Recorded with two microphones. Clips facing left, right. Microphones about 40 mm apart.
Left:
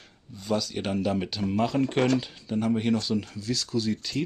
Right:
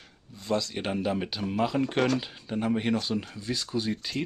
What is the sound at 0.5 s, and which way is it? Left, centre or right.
Speech, centre.